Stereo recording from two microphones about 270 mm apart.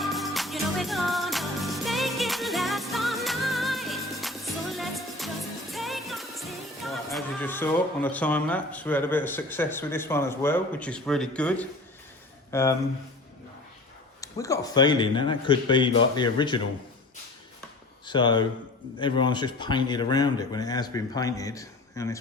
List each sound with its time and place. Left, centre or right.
0.0 s music: centre
12.5 s speech: centre
14.2 s speech: centre
18.0 s speech: centre